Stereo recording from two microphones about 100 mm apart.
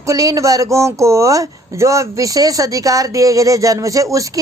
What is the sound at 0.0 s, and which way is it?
A woman's voice, 35° right (ahead or behind).